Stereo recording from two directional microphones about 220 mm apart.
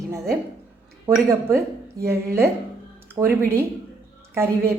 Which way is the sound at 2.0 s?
10° right (ahead or behind).